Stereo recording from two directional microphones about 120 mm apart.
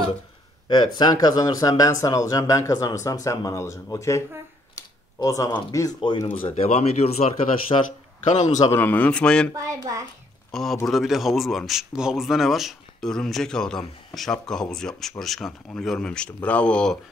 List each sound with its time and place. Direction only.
0.7 s speech: 35° left (ahead or behind)
5.2 s speech: 25° left (ahead or behind)
5.9 s speech: 40° left (ahead or behind)
6.2 s a man's voice: 15° left (ahead or behind)
6.5 s speech: 60° left (ahead or behind)
7.7 s speech: 45° left (ahead or behind)
8.2 s a man's voice: 80° left
8.7 s a man's voice: 15° left (ahead or behind)
9.6 s a child's voice: 25° right (ahead or behind)
10.5 s speech: centre (ahead or behind)